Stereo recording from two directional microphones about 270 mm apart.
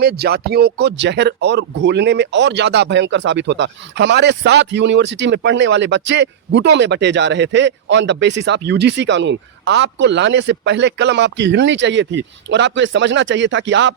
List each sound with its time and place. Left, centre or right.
0.0 s speech: right